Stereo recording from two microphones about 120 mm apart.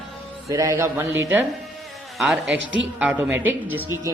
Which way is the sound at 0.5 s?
25° right (ahead or behind).